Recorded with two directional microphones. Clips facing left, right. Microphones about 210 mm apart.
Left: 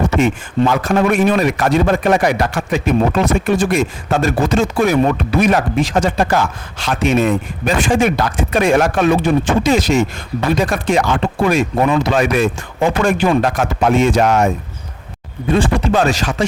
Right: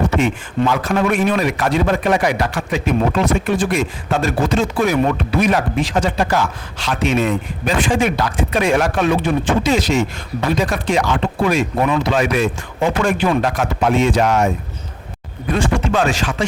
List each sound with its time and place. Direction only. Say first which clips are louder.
0.2 s speech: left 3 dB; 45° left (ahead or behind)
15.4 s speech: left 3 dB; 35° left (ahead or behind)